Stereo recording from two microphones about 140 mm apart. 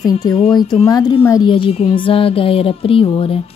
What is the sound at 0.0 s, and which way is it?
A woman's voice, 30° left (ahead or behind).